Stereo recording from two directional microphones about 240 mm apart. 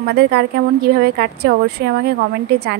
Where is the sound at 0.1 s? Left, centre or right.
Right.